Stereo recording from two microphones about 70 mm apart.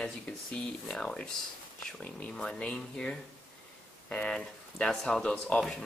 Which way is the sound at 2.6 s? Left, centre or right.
Centre.